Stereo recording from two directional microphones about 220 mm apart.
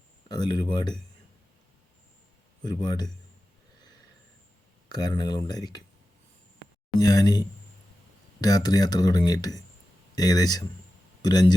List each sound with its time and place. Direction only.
0.3 s speech: 20° left (ahead or behind)
2.6 s speech: 20° left (ahead or behind)
4.9 s speech: 20° left (ahead or behind)
7.0 s speech: 15° left (ahead or behind)